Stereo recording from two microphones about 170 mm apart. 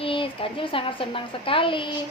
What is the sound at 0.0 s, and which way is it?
A woman's voice, 30° left (ahead or behind).